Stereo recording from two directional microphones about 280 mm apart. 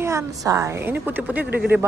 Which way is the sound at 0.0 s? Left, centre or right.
Centre.